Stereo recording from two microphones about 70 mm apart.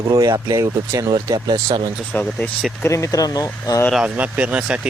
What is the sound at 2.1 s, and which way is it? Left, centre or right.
Speech, centre.